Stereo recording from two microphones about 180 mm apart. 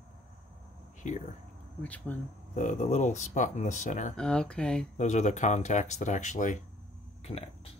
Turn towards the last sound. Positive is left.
turn(degrees=35)  # may be behind; listen again after turning